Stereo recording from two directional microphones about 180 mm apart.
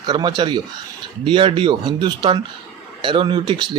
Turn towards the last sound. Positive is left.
turn(degrees=-25)  # may be behind; listen again after turning